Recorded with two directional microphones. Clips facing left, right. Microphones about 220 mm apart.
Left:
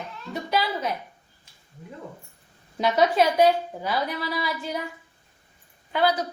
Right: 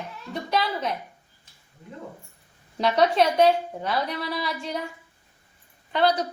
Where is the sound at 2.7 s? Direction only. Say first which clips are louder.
Even; centre (ahead or behind).